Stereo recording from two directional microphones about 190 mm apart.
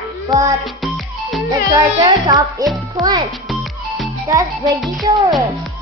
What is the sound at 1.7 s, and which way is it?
A child's voice, 20° right (ahead or behind).